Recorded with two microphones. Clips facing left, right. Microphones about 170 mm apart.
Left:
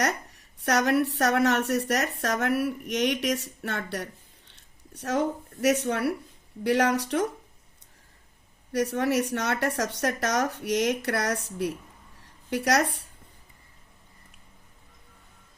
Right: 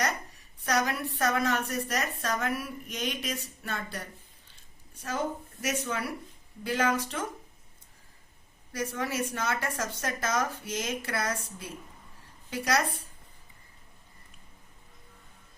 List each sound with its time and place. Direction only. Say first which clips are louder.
0.0 s a woman's voice: left 4 dB; 70° left (ahead or behind)
8.7 s a woman's voice: left 8 dB; 70° left (ahead or behind)